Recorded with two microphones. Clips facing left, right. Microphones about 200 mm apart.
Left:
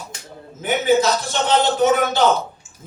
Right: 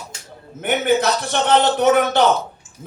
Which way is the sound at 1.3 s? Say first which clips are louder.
Right 2 dB; 60° right (ahead or behind).